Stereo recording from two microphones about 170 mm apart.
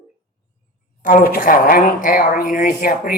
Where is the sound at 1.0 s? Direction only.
55° left (ahead or behind).